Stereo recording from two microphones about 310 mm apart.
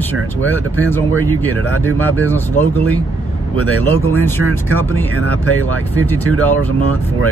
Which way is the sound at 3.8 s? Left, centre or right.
Centre.